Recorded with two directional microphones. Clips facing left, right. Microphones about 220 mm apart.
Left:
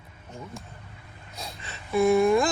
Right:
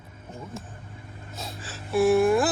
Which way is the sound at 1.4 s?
5° right (ahead or behind).